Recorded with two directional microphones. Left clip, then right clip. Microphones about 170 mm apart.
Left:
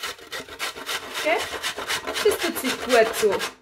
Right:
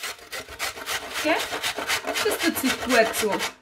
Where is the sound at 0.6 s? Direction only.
5° left (ahead or behind).